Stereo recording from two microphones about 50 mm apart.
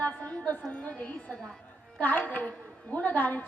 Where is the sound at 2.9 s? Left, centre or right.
Left.